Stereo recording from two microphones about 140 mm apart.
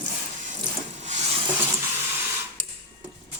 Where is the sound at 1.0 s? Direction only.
55° right (ahead or behind).